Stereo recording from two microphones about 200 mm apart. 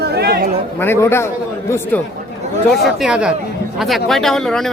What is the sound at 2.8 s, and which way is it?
Speech, 5° right (ahead or behind).